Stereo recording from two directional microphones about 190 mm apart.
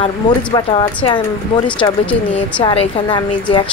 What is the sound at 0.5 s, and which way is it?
Speech, 25° left (ahead or behind).